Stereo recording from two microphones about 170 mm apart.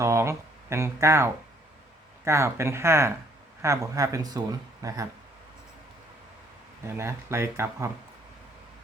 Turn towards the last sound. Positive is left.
turn(degrees=-15)  # may be behind; listen again after turning